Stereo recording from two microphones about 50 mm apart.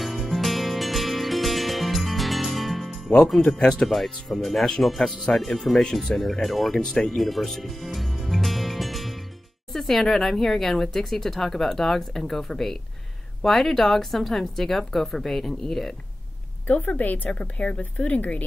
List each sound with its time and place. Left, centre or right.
0.0 s music: centre
3.4 s speech: centre
3.9 s a woman's voice: centre
6.8 s music: centre
9.7 s a woman's voice: centre
16.6 s a woman's voice: left